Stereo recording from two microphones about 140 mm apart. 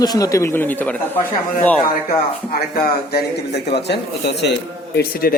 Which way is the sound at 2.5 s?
90° left.